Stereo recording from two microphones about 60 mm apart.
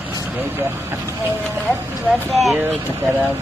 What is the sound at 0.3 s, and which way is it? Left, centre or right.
Speech, right.